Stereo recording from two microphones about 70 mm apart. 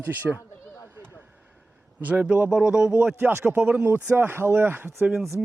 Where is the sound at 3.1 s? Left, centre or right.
Right.